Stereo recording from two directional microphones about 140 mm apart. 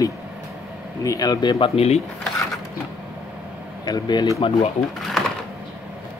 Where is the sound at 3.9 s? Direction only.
30° left (ahead or behind).